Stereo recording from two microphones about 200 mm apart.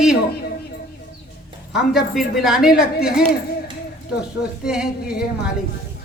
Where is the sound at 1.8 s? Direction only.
Centre (ahead or behind).